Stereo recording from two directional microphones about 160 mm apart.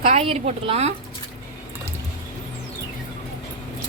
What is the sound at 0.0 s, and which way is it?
Speech, 40° right (ahead or behind).